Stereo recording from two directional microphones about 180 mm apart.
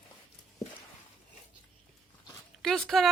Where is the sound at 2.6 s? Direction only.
Centre (ahead or behind).